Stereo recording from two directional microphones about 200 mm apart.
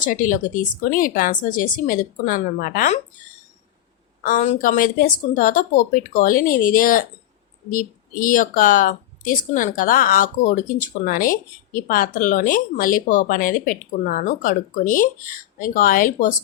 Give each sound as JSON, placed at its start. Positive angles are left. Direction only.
{"t": 0.0, "sound": "speech", "side_deg": 40}
{"t": 4.2, "sound": "speech", "side_deg": 40}